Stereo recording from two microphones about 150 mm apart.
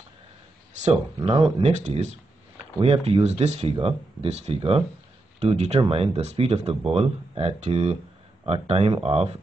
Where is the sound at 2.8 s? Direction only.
40° right (ahead or behind).